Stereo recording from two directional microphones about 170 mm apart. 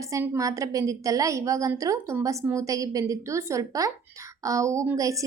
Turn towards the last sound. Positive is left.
turn(degrees=-20)  # may be behind; listen again after turning